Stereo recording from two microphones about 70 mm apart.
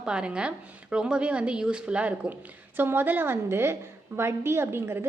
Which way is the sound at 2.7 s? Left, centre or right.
Right.